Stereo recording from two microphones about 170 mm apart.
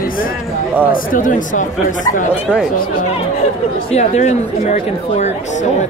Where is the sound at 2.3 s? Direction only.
5° right (ahead or behind).